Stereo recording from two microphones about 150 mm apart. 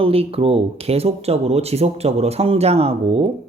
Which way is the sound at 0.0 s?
40° right (ahead or behind).